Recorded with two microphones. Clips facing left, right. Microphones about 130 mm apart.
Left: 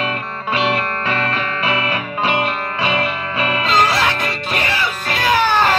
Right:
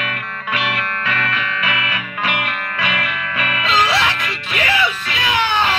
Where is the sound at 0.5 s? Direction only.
30° left (ahead or behind).